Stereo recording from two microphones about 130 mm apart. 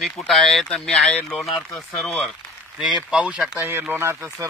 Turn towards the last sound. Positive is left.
turn(degrees=-20)  # may be behind; listen again after turning